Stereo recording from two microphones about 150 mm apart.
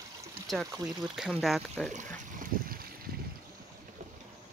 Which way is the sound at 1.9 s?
70° right (ahead or behind).